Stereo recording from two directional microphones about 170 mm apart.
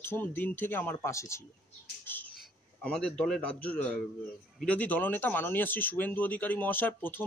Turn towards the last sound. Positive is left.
turn(degrees=10)  # may be behind; listen again after turning